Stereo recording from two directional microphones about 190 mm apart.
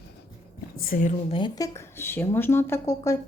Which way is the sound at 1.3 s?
25° left (ahead or behind).